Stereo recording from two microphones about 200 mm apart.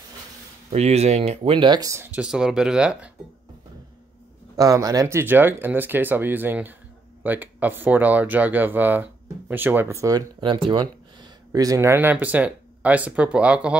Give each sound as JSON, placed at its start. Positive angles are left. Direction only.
{"t": 0.7, "sound": "speech", "side_deg": -30}
{"t": 4.6, "sound": "speech", "side_deg": -15}